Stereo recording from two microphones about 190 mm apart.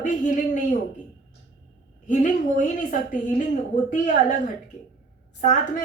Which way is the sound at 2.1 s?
40° left (ahead or behind).